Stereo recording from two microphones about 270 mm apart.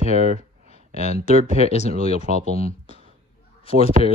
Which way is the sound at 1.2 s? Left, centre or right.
Left.